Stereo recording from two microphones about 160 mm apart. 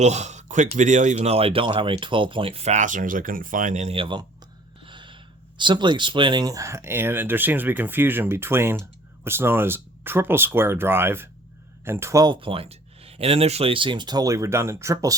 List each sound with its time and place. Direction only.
0.0 s speech: 45° right (ahead or behind); by 15.1 s 15° right (ahead or behind)